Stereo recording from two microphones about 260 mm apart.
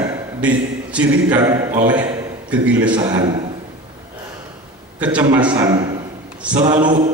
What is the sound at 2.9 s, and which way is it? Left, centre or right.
Speech, centre.